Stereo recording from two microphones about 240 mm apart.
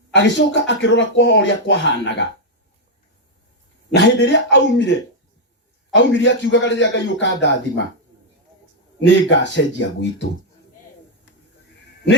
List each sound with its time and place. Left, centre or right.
0.1 s speech: left
3.9 s speech: left
5.9 s speech: left
9.0 s speech: left